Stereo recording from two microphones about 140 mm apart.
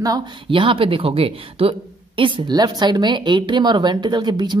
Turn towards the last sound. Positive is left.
turn(degrees=-30)  # may be behind; listen again after turning